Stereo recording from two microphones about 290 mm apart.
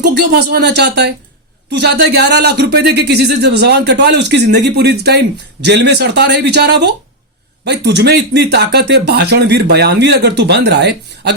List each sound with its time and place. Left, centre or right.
0.0 s speech: right